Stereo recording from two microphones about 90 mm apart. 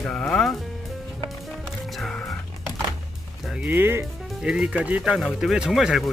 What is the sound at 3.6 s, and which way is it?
Speech, 20° right (ahead or behind).